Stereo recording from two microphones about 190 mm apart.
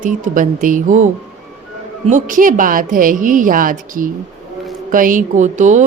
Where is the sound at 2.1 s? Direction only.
45° right (ahead or behind).